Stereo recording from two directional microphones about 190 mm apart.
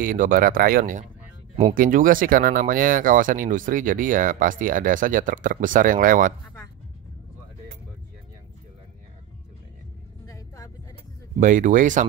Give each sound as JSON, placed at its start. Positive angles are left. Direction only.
{"t": 0.0, "sound": "speech", "side_deg": -45}
{"t": 10.2, "sound": "vehicle", "side_deg": 15}
{"t": 11.3, "sound": "speech", "side_deg": -40}